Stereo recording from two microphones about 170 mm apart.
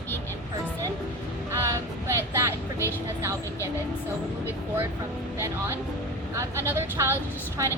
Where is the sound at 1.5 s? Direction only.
15° right (ahead or behind).